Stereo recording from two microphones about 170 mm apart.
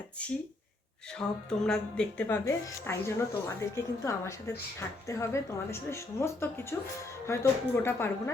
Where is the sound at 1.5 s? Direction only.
5° left (ahead or behind).